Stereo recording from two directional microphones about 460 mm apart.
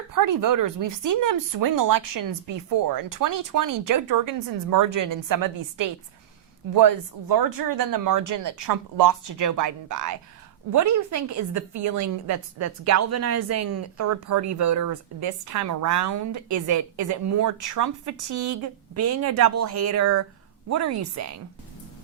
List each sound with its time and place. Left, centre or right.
0.1 s a woman's voice: right